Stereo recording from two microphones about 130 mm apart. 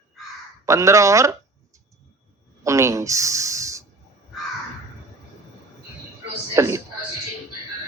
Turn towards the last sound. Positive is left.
turn(degrees=-20)  # may be behind; listen again after turning